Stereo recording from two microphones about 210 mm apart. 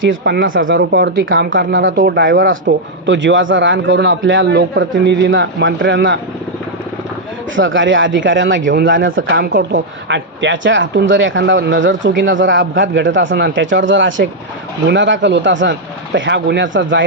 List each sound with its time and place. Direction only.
0.0 s speech: 60° right (ahead or behind); by 0.7 s 40° right (ahead or behind)
0.7 s a man's voice: 55° right (ahead or behind)
7.5 s a man's voice: 65° right (ahead or behind)